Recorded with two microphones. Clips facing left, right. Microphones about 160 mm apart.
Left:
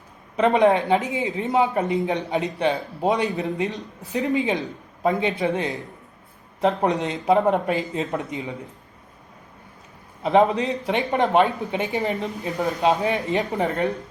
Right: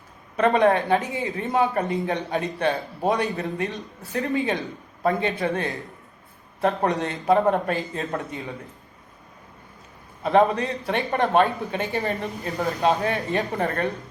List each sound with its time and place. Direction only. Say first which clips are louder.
0.3 s speech: left 1 dB; 20° left (ahead or behind)
10.2 s speech: left 1 dB; 20° left (ahead or behind)